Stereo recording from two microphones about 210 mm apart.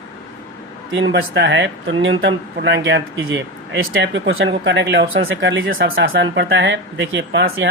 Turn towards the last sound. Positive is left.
turn(degrees=-60)  # may be behind; listen again after turning